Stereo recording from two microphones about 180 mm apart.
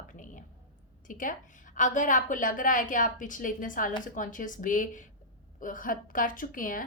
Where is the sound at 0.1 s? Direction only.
45° left (ahead or behind).